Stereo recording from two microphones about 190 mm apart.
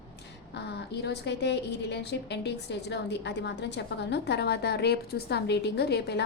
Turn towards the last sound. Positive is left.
turn(degrees=60)  # may be behind; listen again after turning